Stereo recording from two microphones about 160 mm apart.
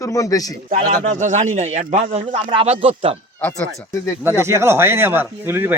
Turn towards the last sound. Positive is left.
turn(degrees=-15)  # may be behind; listen again after turning